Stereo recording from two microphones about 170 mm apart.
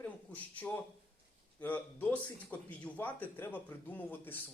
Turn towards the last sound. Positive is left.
turn(degrees=10)  # may be behind; listen again after turning